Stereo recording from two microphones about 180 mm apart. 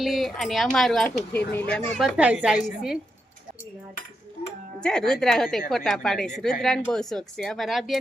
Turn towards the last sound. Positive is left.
turn(degrees=0)  # may be behind; listen again after turning